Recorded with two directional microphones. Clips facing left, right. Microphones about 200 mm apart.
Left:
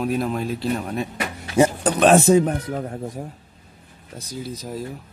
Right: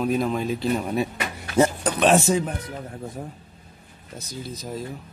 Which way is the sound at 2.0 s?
55° left (ahead or behind).